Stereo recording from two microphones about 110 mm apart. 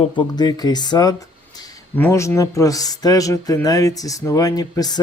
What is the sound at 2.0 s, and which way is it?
A man's voice, 20° left (ahead or behind).